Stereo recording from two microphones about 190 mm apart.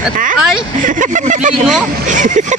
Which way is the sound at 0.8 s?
45° right (ahead or behind).